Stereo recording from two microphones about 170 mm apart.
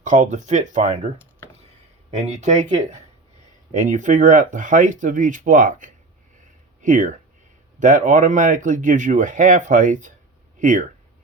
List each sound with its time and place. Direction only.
0.0 s speech: 45° right (ahead or behind)